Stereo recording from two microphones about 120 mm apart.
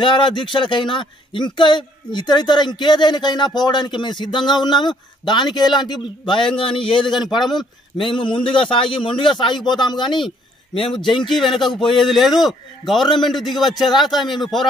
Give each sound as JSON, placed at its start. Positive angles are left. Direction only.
{"t": 0.0, "sound": "a man's voice", "side_deg": 40}
{"t": 7.4, "sound": "a man's voice", "side_deg": 0}
{"t": 8.1, "sound": "a man's voice", "side_deg": 40}
{"t": 11.5, "sound": "a man's voice", "side_deg": 0}